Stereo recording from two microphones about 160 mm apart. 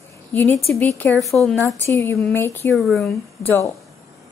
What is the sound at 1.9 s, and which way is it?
Speech, 15° left (ahead or behind).